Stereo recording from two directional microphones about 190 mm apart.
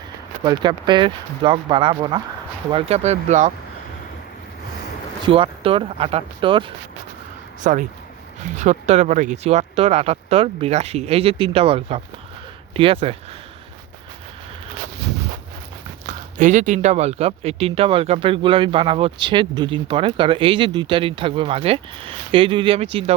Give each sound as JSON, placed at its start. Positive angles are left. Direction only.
{"t": 0.4, "sound": "speech", "side_deg": -25}
{"t": 5.2, "sound": "speech", "side_deg": -30}
{"t": 7.6, "sound": "speech", "side_deg": -40}
{"t": 16.0, "sound": "speech", "side_deg": -40}